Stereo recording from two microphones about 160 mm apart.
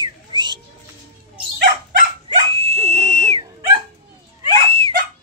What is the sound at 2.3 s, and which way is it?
Dog, 35° right (ahead or behind).